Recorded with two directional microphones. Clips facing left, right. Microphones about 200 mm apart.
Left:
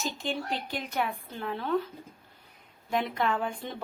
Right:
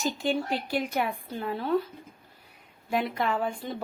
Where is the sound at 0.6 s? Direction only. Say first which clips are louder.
Right 4 dB; 10° right (ahead or behind).